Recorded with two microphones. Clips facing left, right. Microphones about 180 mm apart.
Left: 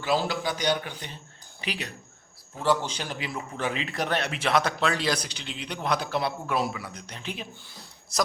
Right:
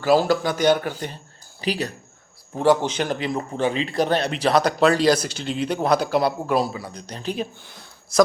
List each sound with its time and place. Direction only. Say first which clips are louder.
0.0 s speech: right 8 dB; 45° right (ahead or behind)
3.1 s speech: right 9 dB; 45° right (ahead or behind)
8.1 s a woman's voice: right 11 dB; centre (ahead or behind)